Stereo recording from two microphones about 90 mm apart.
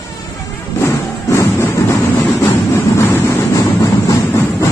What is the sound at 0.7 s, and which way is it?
Vehicle, 35° left (ahead or behind).